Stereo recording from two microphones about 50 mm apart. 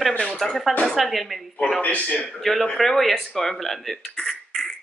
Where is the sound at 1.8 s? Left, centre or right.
Left.